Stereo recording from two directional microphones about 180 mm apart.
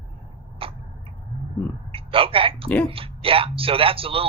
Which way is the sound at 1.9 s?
30° right (ahead or behind).